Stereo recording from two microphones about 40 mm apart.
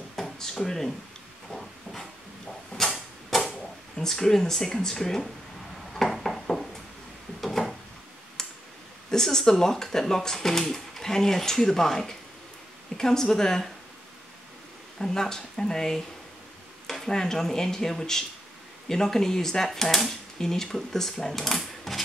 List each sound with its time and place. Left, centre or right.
0.1 s drawer open or close: centre
1.5 s hiss: centre
2.7 s a sound: left
3.3 s speech: centre
5.9 s a sound: centre
9.1 s speech: centre
15.0 s speech: centre
16.8 s a sound: centre
17.1 s speech: centre